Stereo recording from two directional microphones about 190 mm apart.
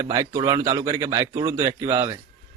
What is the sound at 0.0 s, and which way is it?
Speech, 15° right (ahead or behind).